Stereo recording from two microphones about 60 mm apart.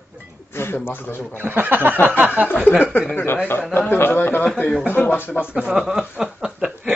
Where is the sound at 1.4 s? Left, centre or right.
Right.